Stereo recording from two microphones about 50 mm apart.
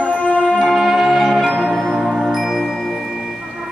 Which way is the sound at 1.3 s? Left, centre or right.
Centre.